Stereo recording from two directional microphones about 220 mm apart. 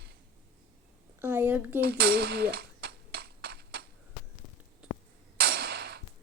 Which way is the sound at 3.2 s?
45° right (ahead or behind).